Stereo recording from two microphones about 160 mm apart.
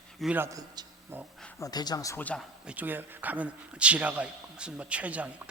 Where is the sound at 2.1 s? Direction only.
10° left (ahead or behind).